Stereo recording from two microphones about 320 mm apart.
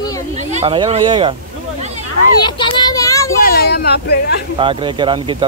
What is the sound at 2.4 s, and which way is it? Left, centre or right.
Speech, centre.